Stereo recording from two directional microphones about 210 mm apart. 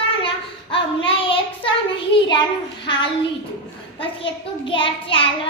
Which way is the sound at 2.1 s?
20° left (ahead or behind).